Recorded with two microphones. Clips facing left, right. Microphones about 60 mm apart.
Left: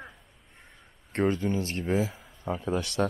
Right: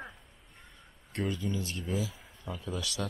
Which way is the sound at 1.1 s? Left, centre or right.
Left.